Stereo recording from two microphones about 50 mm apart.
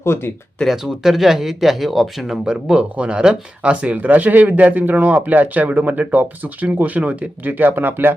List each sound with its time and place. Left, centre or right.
0.0 s speech: left
0.7 s speech: centre; by 3.9 s right
3.9 s speech: right